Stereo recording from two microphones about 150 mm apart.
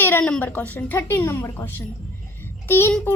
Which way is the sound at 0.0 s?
10° left (ahead or behind).